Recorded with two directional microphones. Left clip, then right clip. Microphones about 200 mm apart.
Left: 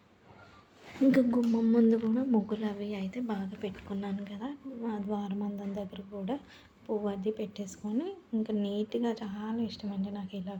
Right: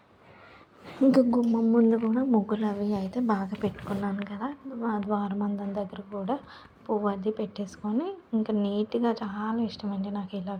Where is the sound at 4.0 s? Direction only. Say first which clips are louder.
Right 6 dB; 5° right (ahead or behind).